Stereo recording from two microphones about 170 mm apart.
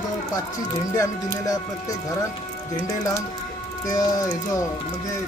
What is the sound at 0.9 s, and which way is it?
Speech, 20° left (ahead or behind).